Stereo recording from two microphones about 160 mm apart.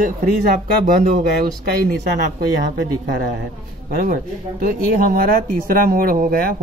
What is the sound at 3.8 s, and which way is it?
Speech, 60° right (ahead or behind).